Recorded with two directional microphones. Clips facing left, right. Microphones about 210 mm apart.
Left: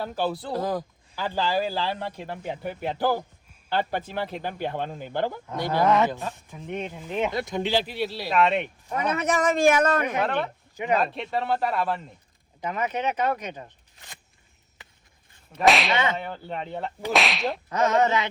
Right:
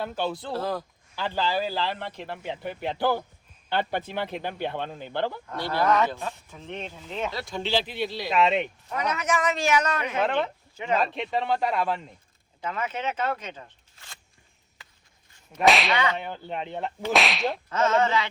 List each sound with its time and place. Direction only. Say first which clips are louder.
0.4 s speech: left 2 dB; 15° left (ahead or behind)
7.9 s speech: left 1 dB; 5° left (ahead or behind)
8.9 s a man's voice: left 3 dB; 30° left (ahead or behind); by 10.2 s 50° left (ahead or behind)
10.8 s speech: left 2 dB; 15° left (ahead or behind)
11.0 s speech: even; centre (ahead or behind)
12.6 s speech: left 3 dB; 15° left (ahead or behind)
15.5 s speech: left 1 dB; centre (ahead or behind)
17.7 s speech: left 2 dB; 15° left (ahead or behind)